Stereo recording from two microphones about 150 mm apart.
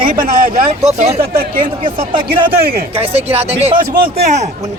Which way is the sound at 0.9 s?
45° right (ahead or behind).